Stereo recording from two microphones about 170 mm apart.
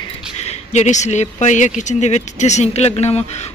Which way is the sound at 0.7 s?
45° left (ahead or behind).